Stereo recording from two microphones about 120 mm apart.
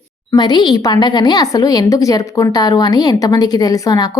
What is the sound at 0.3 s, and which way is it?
Speech, 35° left (ahead or behind).